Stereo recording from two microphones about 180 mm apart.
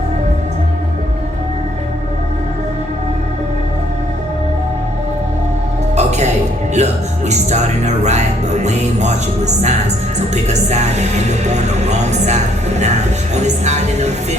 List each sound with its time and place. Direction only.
6.0 s music: 40° right (ahead or behind)
10.3 s speech: 40° right (ahead or behind)